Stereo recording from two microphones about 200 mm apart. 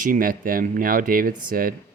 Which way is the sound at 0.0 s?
45° right (ahead or behind).